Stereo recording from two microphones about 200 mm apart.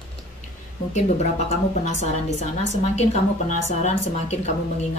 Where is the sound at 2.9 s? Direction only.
35° left (ahead or behind).